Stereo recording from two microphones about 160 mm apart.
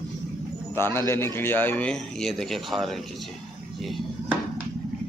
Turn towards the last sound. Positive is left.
turn(degrees=0)  # may be behind; listen again after turning